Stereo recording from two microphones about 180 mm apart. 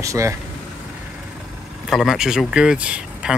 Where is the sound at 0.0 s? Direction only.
15° right (ahead or behind).